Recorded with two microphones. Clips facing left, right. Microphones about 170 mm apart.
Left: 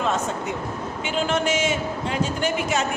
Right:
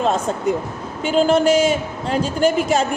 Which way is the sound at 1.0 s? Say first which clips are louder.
Right 9 dB; 35° right (ahead or behind).